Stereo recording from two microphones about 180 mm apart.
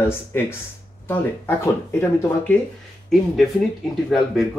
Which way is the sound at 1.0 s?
15° left (ahead or behind).